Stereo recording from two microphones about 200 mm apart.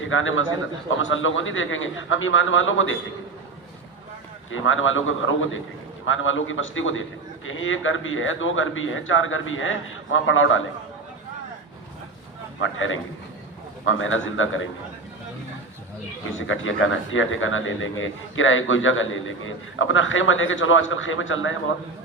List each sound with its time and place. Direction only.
0.1 s a man's voice: 80° left
4.5 s a man's voice: 80° left
12.5 s a man's voice: 75° left (ahead or behind)
16.5 s a man's voice: 75° left (ahead or behind)